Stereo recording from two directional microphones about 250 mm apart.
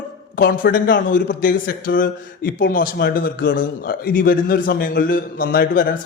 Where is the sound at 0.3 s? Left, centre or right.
Left.